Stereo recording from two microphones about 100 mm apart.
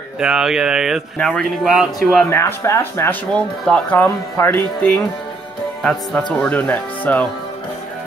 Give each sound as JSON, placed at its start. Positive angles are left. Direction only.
{"t": 0.2, "sound": "speech", "side_deg": -5}
{"t": 1.1, "sound": "speech", "side_deg": 10}
{"t": 1.6, "sound": "speech", "side_deg": -5}
{"t": 2.2, "sound": "speech", "side_deg": 30}
{"t": 3.6, "sound": "speech", "side_deg": 10}
{"t": 4.0, "sound": "speech", "side_deg": 20}
{"t": 5.8, "sound": "speech", "side_deg": 5}